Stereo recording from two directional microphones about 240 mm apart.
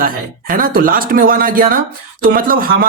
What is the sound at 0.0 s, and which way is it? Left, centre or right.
Speech, right.